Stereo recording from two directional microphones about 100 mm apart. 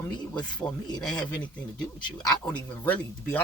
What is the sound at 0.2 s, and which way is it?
Speech, 45° left (ahead or behind).